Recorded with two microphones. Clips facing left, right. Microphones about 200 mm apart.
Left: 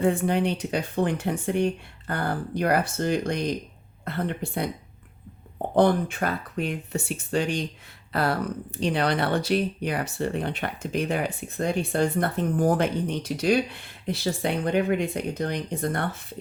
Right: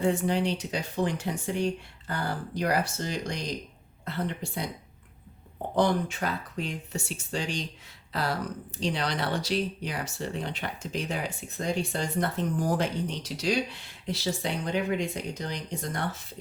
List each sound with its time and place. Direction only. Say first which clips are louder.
0.0 s speech: left 3 dB; 55° left (ahead or behind)
5.7 s speech: left 5 dB; 55° left (ahead or behind)